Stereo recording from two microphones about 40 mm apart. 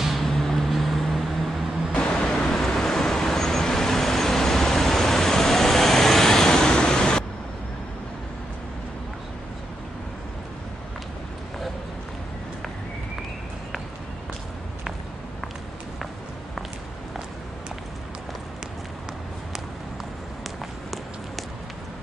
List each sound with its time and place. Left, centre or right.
0.0 s vehicle: centre
0.3 s vehicle: centre
1.9 s pink noise: left
2.1 s vehicle: centre